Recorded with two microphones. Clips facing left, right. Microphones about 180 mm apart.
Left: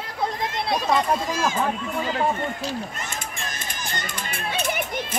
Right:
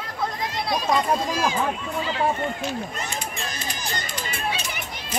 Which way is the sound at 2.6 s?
50° left (ahead or behind).